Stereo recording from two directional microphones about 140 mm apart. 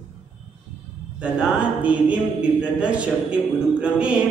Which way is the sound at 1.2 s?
10° right (ahead or behind).